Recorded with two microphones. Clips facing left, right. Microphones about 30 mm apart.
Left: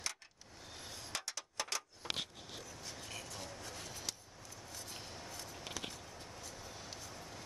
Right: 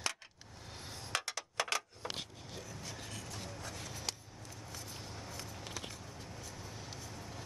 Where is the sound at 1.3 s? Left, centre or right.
Right.